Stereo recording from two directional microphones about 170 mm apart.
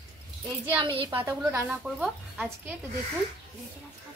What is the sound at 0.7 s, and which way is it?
Speech, 30° right (ahead or behind).